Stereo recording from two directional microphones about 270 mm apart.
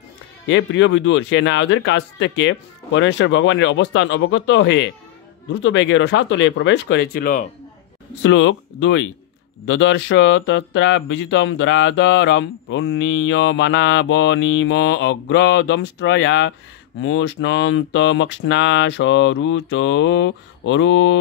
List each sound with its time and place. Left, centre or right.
0.5 s speech: left
8.2 s speech: left